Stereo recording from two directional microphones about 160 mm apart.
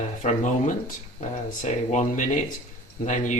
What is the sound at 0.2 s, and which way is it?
Speech, 50° left (ahead or behind).